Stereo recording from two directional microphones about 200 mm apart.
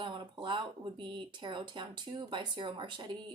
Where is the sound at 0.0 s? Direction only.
25° right (ahead or behind).